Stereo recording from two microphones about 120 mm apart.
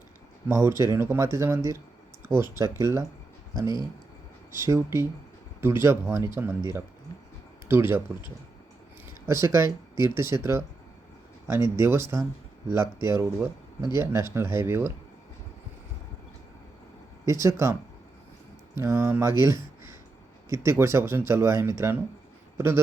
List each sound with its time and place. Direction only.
0.4 s speech: 20° right (ahead or behind)
7.7 s speech: 20° right (ahead or behind)
9.2 s speech: 25° right (ahead or behind)
17.2 s a man's voice: 25° right (ahead or behind)